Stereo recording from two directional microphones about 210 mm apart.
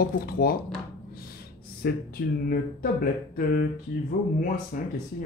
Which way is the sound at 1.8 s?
45° left (ahead or behind).